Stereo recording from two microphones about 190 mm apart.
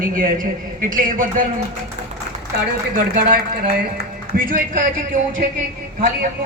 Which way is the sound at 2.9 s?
45° right (ahead or behind).